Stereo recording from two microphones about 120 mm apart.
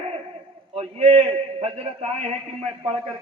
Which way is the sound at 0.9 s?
70° right (ahead or behind).